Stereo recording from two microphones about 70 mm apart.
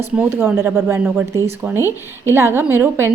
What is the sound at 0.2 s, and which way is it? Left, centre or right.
A woman's voice, right.